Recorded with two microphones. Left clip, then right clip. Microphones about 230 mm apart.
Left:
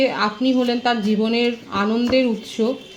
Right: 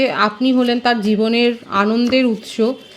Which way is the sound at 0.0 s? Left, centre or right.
Right.